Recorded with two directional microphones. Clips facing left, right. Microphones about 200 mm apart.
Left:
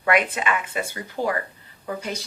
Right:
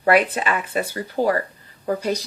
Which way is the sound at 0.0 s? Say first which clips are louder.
Right 4 dB; 35° right (ahead or behind).